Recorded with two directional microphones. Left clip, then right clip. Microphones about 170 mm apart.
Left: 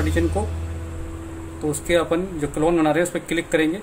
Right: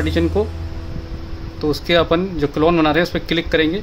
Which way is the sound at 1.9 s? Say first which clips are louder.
Right 4 dB; 50° right (ahead or behind).